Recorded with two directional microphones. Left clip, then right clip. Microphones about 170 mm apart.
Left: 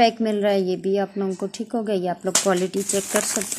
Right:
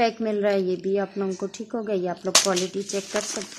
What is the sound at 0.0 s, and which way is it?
A woman's voice, 10° left (ahead or behind).